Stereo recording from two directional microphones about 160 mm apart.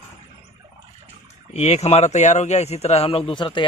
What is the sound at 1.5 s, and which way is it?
Speech, 40° left (ahead or behind).